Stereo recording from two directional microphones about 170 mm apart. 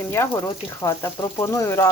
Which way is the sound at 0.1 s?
15° left (ahead or behind).